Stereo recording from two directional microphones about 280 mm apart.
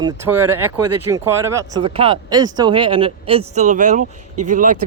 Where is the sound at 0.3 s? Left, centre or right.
Right.